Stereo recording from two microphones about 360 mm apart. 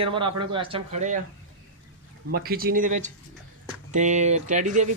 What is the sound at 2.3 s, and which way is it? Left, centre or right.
Speech, right.